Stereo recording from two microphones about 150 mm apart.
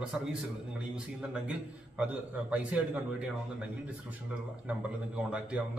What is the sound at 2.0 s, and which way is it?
A man's voice, 10° right (ahead or behind).